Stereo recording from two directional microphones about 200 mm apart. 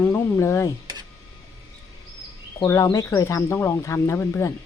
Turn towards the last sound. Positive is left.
turn(degrees=15)  # may be behind; listen again after turning